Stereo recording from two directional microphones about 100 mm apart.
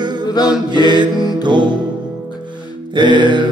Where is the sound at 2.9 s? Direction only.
50° right (ahead or behind).